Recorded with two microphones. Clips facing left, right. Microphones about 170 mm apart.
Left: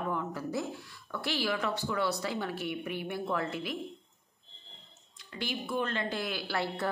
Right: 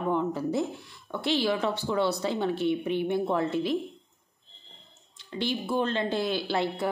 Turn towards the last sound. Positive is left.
turn(degrees=-25)  # may be behind; listen again after turning